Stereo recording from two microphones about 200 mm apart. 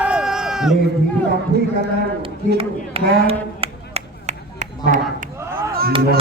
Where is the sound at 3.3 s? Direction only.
30° right (ahead or behind).